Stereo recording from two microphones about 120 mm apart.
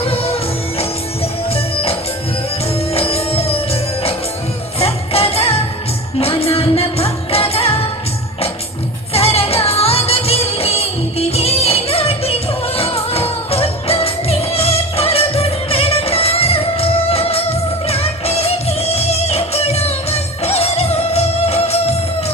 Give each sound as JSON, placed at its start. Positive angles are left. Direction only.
{"t": 0.0, "sound": "music", "side_deg": 55}
{"t": 9.1, "sound": "music", "side_deg": 55}